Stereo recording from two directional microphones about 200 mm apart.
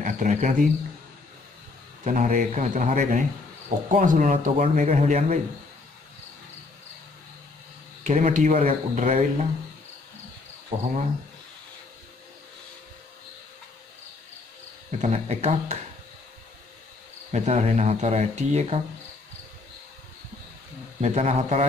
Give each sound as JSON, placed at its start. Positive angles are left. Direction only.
{"t": 0.0, "sound": "a man's voice", "side_deg": -40}
{"t": 2.0, "sound": "speech", "side_deg": -40}
{"t": 8.0, "sound": "speech", "side_deg": -40}
{"t": 15.0, "sound": "speech", "side_deg": -35}
{"t": 17.3, "sound": "speech", "side_deg": -35}
{"t": 21.0, "sound": "speech", "side_deg": -35}